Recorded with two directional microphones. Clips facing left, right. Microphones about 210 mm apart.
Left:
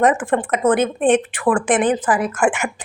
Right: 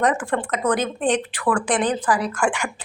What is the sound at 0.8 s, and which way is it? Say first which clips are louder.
Speech: left 6 dB; 55° left (ahead or behind).